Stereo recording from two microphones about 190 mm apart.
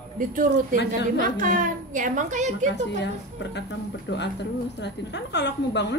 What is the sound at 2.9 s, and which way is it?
A woman's voice, 65° left (ahead or behind).